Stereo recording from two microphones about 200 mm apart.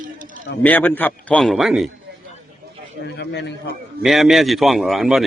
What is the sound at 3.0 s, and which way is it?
Speech, 55° left (ahead or behind).